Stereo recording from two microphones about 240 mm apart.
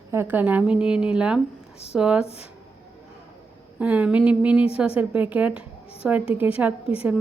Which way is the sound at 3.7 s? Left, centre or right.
Centre.